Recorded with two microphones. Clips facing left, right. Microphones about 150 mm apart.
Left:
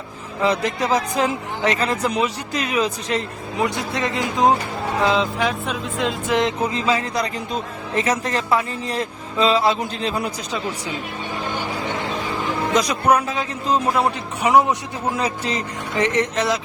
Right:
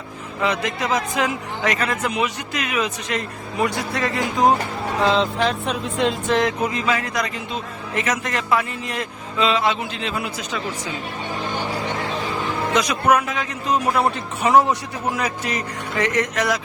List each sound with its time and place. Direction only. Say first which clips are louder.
0.4 s a man's voice: left 2 dB; 35° left (ahead or behind)
5.0 s music: right 1 dB; 5° left (ahead or behind)
6.3 s a man's voice: even; 25° left (ahead or behind)
12.7 s a man's voice: even; 35° left (ahead or behind)
14.4 s a man's voice: even; 15° left (ahead or behind)
15.1 s speech: left 2 dB; 25° left (ahead or behind)